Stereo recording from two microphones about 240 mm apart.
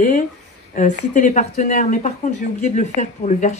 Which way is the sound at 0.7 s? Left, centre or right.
Left.